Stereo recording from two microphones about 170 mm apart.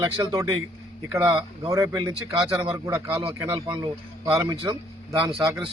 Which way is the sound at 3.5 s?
25° right (ahead or behind).